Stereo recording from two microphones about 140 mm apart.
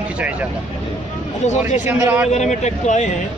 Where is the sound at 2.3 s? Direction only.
55° left (ahead or behind).